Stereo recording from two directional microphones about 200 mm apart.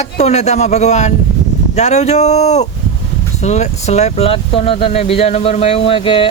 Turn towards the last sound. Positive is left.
turn(degrees=25)  # may be behind; listen again after turning